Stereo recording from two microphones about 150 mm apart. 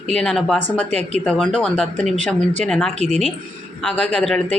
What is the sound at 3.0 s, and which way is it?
Speech, 45° right (ahead or behind).